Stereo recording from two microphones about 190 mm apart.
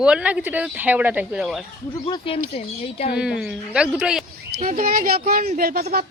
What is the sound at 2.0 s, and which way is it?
Speech, 30° left (ahead or behind).